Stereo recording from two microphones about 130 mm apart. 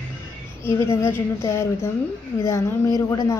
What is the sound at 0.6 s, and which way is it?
A woman's voice, 20° left (ahead or behind).